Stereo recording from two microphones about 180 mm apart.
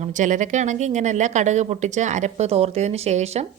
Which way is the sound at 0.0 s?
45° right (ahead or behind).